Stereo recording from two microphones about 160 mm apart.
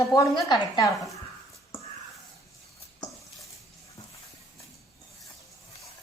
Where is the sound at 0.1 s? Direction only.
25° left (ahead or behind).